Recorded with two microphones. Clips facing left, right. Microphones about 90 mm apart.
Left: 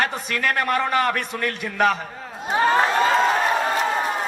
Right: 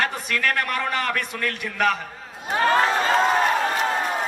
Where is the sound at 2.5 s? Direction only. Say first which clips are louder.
Left 1 dB; 15° left (ahead or behind).